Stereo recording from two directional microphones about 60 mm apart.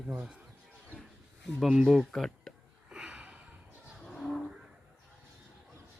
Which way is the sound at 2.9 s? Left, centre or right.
Centre.